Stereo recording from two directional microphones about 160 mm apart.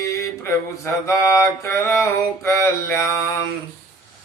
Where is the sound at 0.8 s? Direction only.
15° left (ahead or behind).